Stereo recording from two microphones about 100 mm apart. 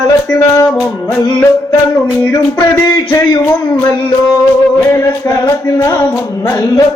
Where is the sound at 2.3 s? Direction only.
40° left (ahead or behind).